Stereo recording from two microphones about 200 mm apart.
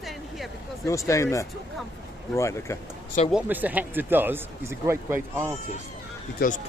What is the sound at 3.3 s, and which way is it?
Speech, 5° right (ahead or behind).